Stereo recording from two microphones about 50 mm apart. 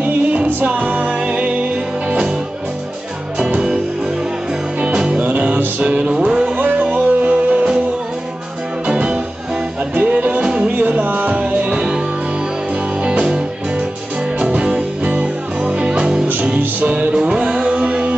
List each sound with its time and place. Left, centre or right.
0.0 s music: right
3.3 s music: centre
6.5 s music: right
8.8 s music: right
10.4 s music: centre
10.7 s music: right; by 12.0 s centre
13.0 s music: right
16.5 s music: right
17.2 s music: centre